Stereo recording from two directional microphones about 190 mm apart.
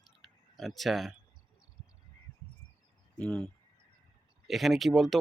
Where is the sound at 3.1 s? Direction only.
5° left (ahead or behind).